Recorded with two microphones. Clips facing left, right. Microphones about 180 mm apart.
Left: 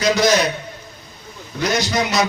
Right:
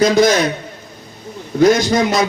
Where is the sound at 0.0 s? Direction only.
50° right (ahead or behind).